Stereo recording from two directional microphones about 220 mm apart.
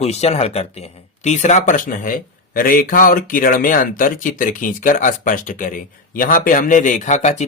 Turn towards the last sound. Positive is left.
turn(degrees=30)  # may be behind; listen again after turning